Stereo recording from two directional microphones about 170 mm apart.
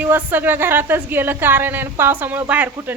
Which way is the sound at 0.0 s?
10° right (ahead or behind).